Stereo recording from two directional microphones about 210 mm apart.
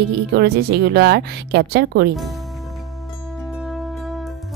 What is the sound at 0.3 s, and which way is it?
Speech, 50° right (ahead or behind).